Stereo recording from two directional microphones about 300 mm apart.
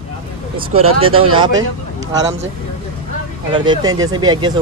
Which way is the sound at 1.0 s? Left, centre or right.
Centre.